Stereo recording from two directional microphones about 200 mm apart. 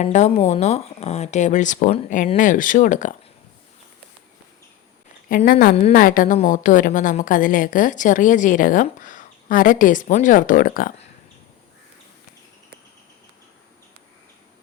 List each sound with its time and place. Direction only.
0.0 s a woman's voice: 35° left (ahead or behind)
5.3 s a woman's voice: 45° left (ahead or behind)